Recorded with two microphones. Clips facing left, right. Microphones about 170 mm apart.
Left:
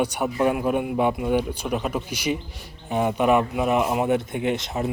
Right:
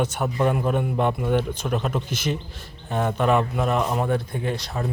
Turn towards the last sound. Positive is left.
turn(degrees=20)  # may be behind; listen again after turning